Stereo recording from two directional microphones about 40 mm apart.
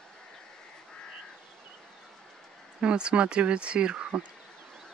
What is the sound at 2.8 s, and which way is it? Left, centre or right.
Speech, right.